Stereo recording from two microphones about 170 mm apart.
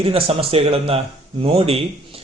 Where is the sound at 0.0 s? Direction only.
35° right (ahead or behind).